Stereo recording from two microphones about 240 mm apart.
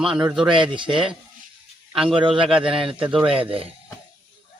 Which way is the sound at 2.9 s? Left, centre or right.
Centre.